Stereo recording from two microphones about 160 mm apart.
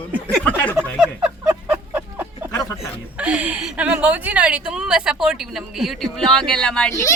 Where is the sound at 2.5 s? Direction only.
20° left (ahead or behind).